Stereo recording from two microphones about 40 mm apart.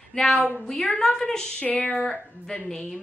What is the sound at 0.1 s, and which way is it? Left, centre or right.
A woman's voice, centre.